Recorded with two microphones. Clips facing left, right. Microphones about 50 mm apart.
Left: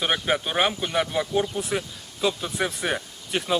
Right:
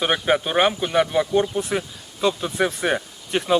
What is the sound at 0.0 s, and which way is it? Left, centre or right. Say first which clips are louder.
Speech: right 4 dB; centre.